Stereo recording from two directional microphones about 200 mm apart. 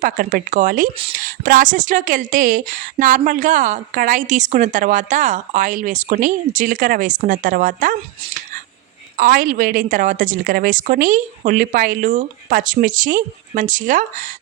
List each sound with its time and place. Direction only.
0.0 s a woman's voice: 40° right (ahead or behind)
9.1 s a woman's voice: 45° right (ahead or behind)